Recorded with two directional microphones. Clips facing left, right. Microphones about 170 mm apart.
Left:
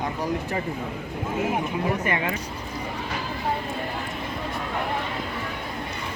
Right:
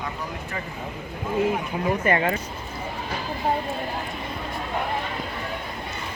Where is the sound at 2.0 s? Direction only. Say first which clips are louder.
Right 4 dB; 40° right (ahead or behind).